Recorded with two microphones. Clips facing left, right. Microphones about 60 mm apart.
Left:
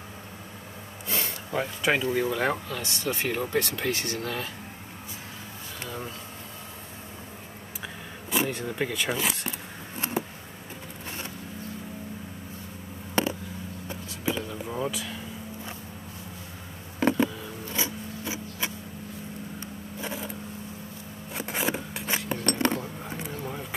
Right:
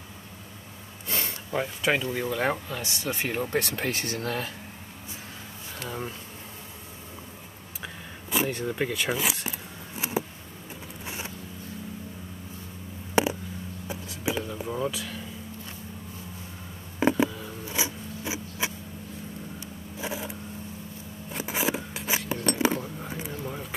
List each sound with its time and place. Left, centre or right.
1.0 s snort: centre
2.1 s speech: centre
2.7 s speech: centre
3.7 s speech: right
7.8 s a sound: centre
11.1 s vehicle: centre
13.1 s a sound: centre
17.0 s insect: centre
17.7 s gears: centre
20.0 s a sound: centre